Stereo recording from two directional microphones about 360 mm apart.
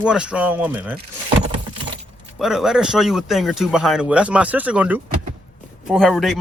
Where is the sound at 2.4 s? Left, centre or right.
Centre.